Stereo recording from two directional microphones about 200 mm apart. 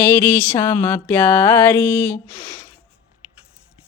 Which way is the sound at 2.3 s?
25° left (ahead or behind).